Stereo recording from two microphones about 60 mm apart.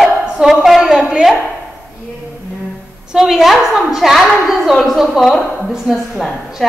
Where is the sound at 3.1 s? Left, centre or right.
Centre.